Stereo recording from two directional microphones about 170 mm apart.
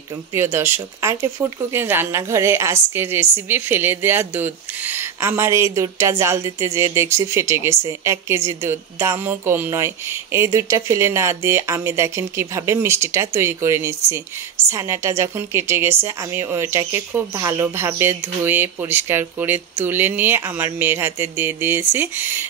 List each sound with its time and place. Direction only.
0.3 s speech: 15° right (ahead or behind)